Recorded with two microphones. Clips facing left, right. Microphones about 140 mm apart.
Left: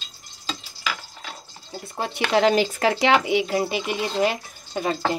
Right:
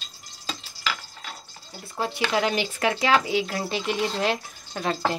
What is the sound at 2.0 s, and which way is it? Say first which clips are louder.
Speech: left 4 dB; 25° left (ahead or behind).